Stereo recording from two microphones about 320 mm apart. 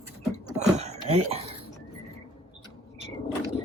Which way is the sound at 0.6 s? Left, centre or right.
Right.